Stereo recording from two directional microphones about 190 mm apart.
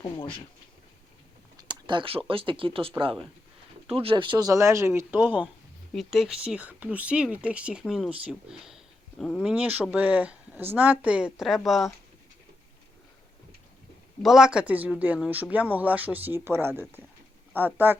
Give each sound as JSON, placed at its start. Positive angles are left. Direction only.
{"t": 0.0, "sound": "speech", "side_deg": 25}
{"t": 1.6, "sound": "speech", "side_deg": -25}
{"t": 5.9, "sound": "speech", "side_deg": 0}
{"t": 14.2, "sound": "speech", "side_deg": 0}